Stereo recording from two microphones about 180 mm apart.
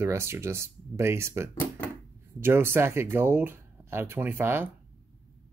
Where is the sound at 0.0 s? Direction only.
15° right (ahead or behind).